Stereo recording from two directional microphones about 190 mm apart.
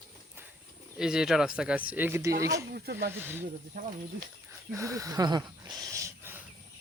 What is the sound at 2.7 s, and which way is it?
Speech, 60° right (ahead or behind).